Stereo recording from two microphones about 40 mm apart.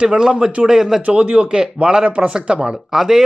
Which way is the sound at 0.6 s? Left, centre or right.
Centre.